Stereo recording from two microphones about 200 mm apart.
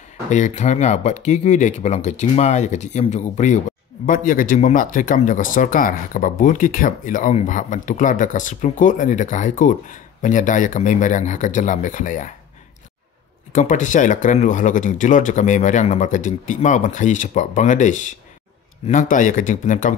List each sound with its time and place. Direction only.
0.3 s speech: 35° left (ahead or behind)
13.5 s speech: 40° left (ahead or behind)